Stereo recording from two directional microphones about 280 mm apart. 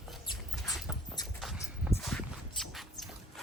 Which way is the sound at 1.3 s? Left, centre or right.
Centre.